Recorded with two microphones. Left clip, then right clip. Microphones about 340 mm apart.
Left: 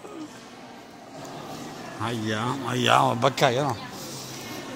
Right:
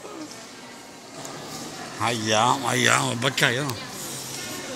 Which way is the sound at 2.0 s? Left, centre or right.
Centre.